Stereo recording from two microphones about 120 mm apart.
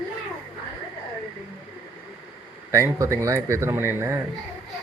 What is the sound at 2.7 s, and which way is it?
Speech, 25° right (ahead or behind).